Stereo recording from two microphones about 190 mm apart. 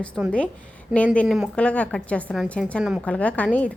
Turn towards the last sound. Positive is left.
turn(degrees=5)  # may be behind; listen again after turning